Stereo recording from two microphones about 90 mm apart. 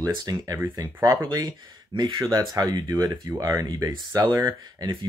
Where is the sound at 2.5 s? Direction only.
40° right (ahead or behind).